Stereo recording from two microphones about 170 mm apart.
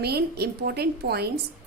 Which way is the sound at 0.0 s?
70° right (ahead or behind).